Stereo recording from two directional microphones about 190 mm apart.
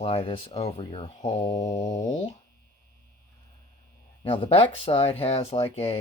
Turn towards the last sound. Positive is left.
turn(degrees=30)  # may be behind; listen again after turning